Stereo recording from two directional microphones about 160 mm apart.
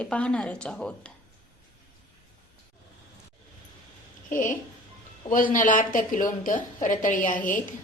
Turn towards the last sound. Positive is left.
turn(degrees=55)  # may be behind; listen again after turning